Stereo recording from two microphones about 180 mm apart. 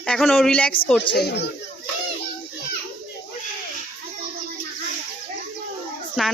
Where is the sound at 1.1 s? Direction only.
65° left (ahead or behind).